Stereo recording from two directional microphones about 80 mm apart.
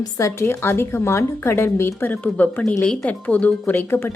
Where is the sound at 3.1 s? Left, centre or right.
Centre.